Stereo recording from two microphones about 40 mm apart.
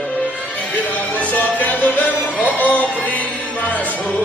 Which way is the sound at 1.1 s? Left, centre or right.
Left.